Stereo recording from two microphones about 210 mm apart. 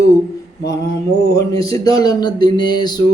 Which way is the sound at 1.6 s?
15° left (ahead or behind).